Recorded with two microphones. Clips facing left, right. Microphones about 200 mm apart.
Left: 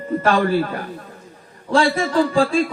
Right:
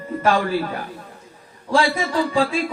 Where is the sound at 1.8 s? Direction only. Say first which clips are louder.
Left 3 dB; 50° left (ahead or behind).